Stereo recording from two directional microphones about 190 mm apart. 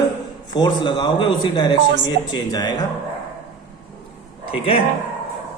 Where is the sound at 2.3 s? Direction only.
20° left (ahead or behind).